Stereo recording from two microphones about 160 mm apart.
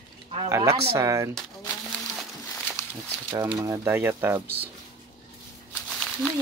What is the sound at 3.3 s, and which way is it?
Speech, 25° right (ahead or behind).